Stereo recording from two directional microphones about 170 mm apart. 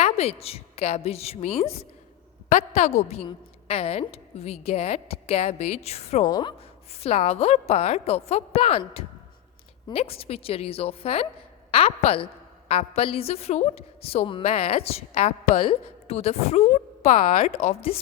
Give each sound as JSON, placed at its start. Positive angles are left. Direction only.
{"t": 0.0, "sound": "a woman's voice", "side_deg": 35}
{"t": 6.2, "sound": "a woman's voice", "side_deg": 25}
{"t": 7.0, "sound": "a woman's voice", "side_deg": 35}